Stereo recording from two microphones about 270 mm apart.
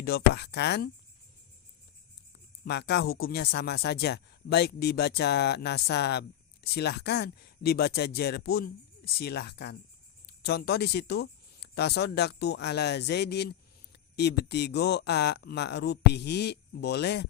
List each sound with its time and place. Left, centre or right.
0.0 s speech: left
2.6 s speech: left